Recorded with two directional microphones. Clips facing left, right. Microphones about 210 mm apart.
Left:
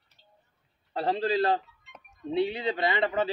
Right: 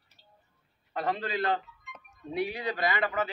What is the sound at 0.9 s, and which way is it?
A man's voice, 30° left (ahead or behind).